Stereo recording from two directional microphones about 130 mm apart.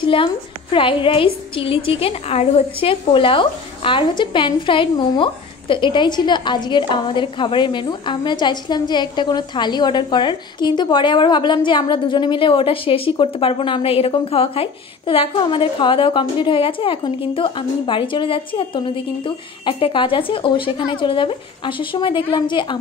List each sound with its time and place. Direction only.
0.0 s a woman's voice: 40° left (ahead or behind)